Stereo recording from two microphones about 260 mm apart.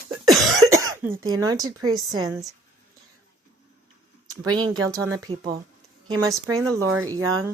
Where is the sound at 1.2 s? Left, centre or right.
Right.